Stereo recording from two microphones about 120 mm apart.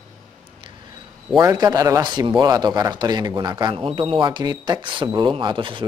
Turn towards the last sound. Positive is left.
turn(degrees=-45)  # may be behind; listen again after turning